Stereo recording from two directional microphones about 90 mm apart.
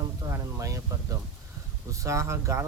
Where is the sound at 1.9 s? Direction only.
35° right (ahead or behind).